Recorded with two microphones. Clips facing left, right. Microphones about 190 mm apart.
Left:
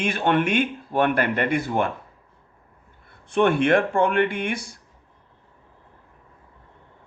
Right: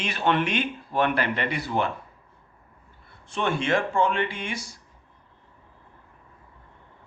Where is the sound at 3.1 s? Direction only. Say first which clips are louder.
Left 8 dB; 55° left (ahead or behind).